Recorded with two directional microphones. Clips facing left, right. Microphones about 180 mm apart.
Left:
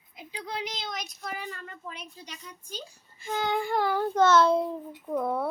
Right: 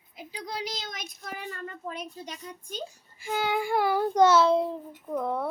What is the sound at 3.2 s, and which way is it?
Child singing, 10° right (ahead or behind).